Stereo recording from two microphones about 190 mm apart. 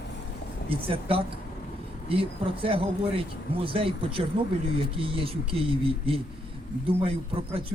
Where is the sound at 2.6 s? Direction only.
30° right (ahead or behind).